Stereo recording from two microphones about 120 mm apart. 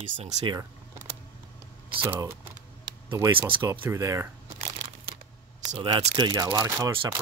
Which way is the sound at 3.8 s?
25° right (ahead or behind).